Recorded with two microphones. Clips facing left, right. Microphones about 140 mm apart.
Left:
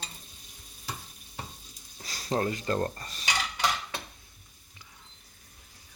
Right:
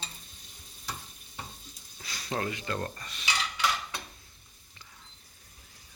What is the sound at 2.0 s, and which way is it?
Cutlery, 35° left (ahead or behind).